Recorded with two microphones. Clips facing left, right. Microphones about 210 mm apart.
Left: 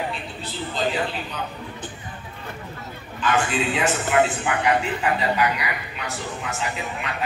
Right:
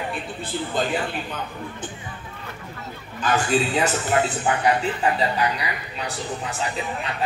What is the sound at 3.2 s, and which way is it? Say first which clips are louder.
A man's voice: right 1 dB; 40° right (ahead or behind).